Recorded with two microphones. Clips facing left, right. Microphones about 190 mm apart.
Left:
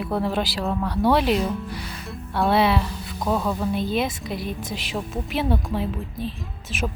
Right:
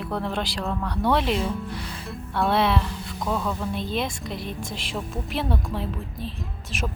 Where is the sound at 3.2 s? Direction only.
15° left (ahead or behind).